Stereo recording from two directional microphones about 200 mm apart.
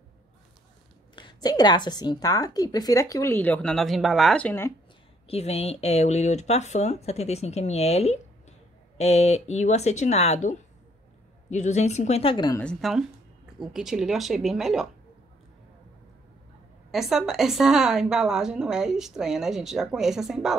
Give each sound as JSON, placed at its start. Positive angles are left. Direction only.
{"t": 1.1, "sound": "speech", "side_deg": 20}
{"t": 5.3, "sound": "speech", "side_deg": 30}
{"t": 12.6, "sound": "a woman's voice", "side_deg": 0}
{"t": 16.9, "sound": "a woman's voice", "side_deg": 0}